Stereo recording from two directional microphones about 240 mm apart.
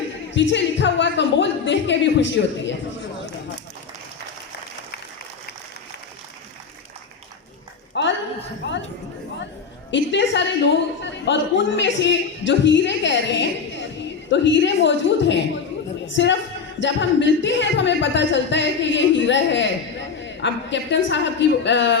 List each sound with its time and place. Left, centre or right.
0.5 s speech: left
7.9 s a sound: left
8.6 s chatter: left
9.9 s speech: left